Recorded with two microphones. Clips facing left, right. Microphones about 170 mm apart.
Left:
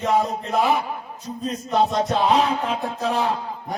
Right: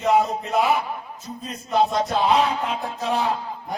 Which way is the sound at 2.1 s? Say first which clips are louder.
Even; 35° left (ahead or behind).